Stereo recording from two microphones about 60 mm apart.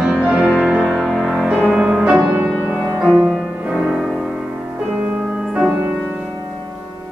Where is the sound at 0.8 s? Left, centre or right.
Centre.